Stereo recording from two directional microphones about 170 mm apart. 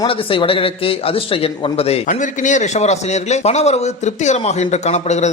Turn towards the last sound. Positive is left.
turn(degrees=40)  # may be behind; listen again after turning